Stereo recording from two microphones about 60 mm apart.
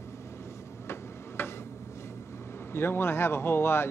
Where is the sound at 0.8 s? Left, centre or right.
Left.